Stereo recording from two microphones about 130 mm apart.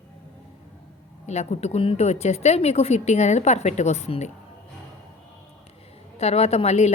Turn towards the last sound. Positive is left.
turn(degrees=55)  # may be behind; listen again after turning